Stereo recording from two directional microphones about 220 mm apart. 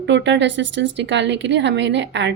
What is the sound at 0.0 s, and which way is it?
A woman's voice, 55° right (ahead or behind).